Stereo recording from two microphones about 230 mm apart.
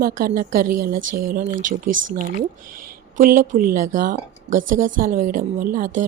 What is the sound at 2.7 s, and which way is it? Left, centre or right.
Speech, right.